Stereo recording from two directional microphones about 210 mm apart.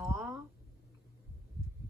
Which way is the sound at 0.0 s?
10° right (ahead or behind).